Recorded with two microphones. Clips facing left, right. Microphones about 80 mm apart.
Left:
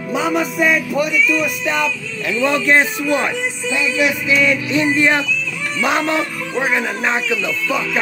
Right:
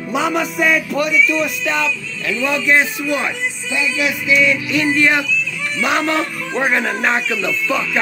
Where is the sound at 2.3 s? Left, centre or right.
Left.